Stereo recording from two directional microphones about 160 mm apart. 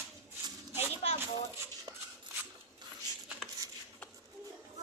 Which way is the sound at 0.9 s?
40° left (ahead or behind).